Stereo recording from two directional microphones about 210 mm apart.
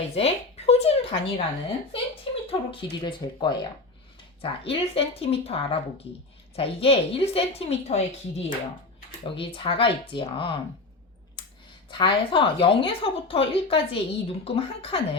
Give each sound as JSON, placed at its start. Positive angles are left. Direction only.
{"t": 0.1, "sound": "a sound", "side_deg": 30}
{"t": 3.0, "sound": "speech", "side_deg": 20}
{"t": 11.9, "sound": "speech", "side_deg": 25}